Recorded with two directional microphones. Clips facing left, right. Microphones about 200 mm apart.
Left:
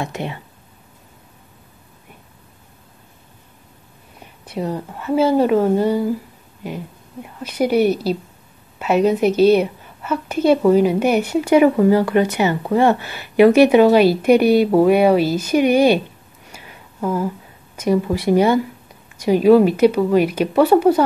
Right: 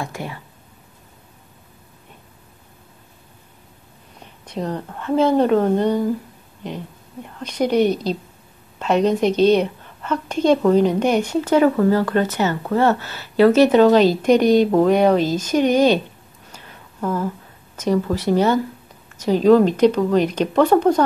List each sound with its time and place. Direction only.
0.0 s speech: 20° left (ahead or behind)
4.2 s a woman's voice: 10° left (ahead or behind)
16.4 s a sound: 10° left (ahead or behind)
17.7 s a woman's voice: 10° left (ahead or behind)